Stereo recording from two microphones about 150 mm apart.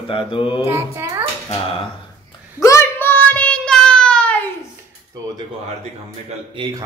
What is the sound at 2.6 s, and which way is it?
Child singing, 20° left (ahead or behind).